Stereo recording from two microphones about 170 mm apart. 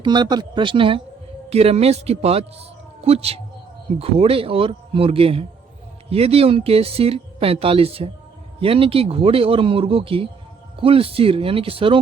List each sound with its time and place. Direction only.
0.0 s a man's voice: 25° right (ahead or behind)